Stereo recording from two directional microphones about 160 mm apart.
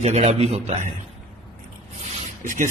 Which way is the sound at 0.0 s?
45° right (ahead or behind).